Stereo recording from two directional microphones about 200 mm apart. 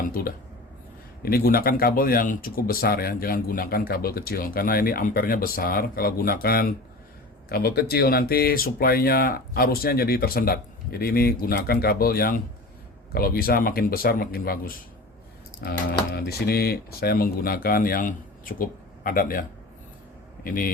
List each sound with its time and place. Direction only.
0.2 s a man's voice: 45° left (ahead or behind)